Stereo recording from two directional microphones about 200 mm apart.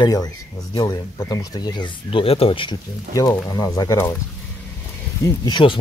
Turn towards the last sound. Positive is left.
turn(degrees=25)  # may be behind; listen again after turning